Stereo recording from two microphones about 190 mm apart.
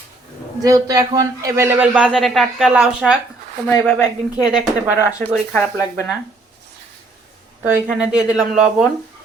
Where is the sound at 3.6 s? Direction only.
10° left (ahead or behind).